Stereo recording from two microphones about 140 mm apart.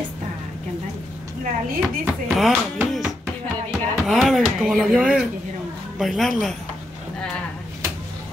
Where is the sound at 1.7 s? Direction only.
Centre (ahead or behind).